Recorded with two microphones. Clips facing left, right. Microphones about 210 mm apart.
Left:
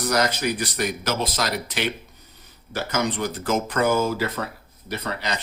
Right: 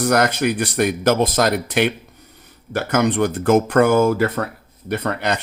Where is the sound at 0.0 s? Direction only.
55° right (ahead or behind).